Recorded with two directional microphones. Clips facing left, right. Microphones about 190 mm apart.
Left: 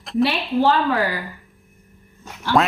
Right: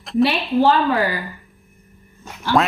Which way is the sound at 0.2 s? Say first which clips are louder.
Right 2 dB; 20° right (ahead or behind).